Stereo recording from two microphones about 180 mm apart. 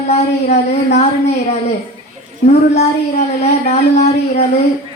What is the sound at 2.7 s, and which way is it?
Speech, 35° left (ahead or behind).